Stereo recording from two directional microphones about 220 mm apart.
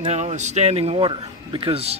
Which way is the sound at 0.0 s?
30° right (ahead or behind).